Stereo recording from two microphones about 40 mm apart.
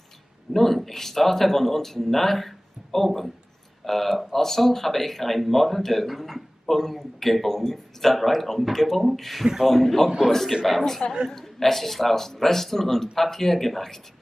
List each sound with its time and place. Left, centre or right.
0.5 s speech: centre